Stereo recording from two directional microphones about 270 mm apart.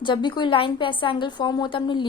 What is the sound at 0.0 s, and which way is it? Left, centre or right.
A woman's voice, centre.